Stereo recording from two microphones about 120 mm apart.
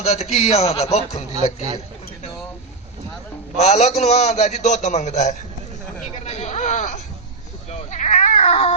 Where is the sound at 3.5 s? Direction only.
65° left (ahead or behind).